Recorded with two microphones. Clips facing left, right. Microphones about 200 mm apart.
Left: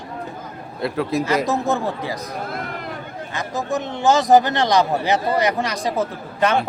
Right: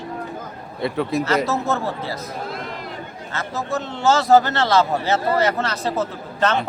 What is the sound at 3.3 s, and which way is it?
A man's voice, 15° left (ahead or behind).